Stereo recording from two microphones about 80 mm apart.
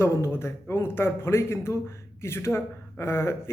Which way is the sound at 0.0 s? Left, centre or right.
Left.